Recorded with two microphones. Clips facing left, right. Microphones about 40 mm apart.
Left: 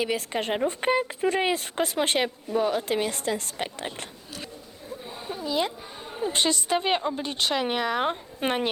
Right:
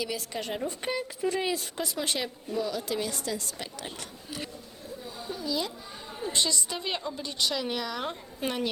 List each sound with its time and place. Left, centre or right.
0.0 s speech: left
5.0 s a sound: left
6.3 s speech: left